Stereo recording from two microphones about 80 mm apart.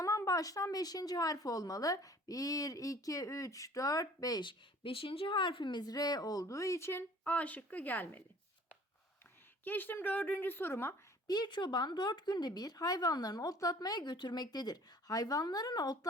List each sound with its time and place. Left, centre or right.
0.0 s speech: left
4.4 s speech: left
5.8 s speech: left
7.3 s a woman's voice: centre
9.6 s a woman's voice: left
11.3 s speech: left